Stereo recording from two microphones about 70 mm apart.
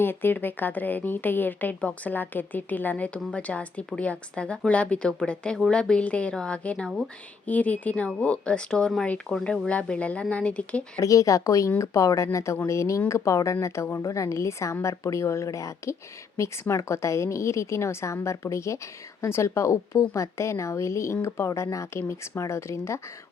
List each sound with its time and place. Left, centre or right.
0.0 s a woman's voice: left
11.0 s a woman's voice: left